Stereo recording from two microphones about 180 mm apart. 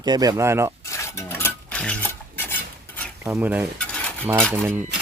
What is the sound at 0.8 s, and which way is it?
Filing, 15° left (ahead or behind).